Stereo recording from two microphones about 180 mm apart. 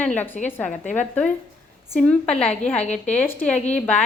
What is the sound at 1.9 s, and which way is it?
Speech, 5° left (ahead or behind).